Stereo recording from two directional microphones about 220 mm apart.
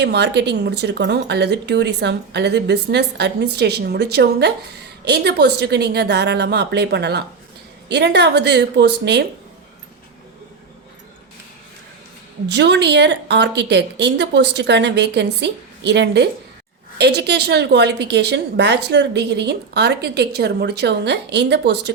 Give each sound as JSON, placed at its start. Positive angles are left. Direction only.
{"t": 0.0, "sound": "a woman's voice", "side_deg": -50}
{"t": 12.5, "sound": "a woman's voice", "side_deg": -50}